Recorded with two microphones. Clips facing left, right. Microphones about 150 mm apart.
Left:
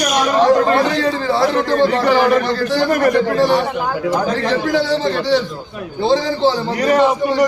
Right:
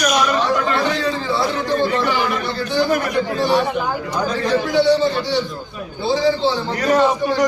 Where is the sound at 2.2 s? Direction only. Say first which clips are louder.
Left 7 dB; 45° left (ahead or behind).